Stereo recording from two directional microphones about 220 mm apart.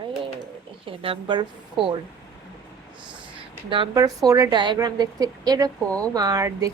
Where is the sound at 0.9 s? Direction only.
25° right (ahead or behind).